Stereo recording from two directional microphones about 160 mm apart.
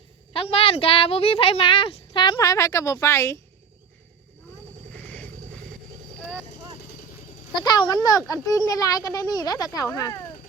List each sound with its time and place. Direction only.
0.3 s speech: 35° left (ahead or behind); by 3.4 s 20° left (ahead or behind)
4.9 s a sound: 5° left (ahead or behind)
7.5 s a child's voice: 30° left (ahead or behind)